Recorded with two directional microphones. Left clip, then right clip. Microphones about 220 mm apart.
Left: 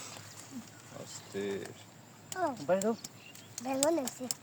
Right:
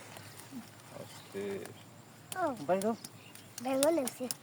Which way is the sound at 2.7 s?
15° left (ahead or behind).